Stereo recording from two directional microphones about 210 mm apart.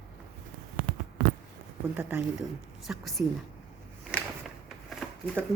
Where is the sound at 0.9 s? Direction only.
40° right (ahead or behind).